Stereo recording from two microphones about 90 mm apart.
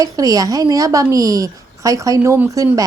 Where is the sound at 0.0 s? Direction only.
40° right (ahead or behind).